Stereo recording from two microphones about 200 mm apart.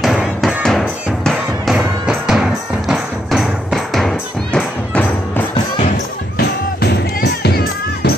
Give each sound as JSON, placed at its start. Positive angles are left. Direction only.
{"t": 0.0, "sound": "music", "side_deg": 0}
{"t": 6.3, "sound": "music", "side_deg": 50}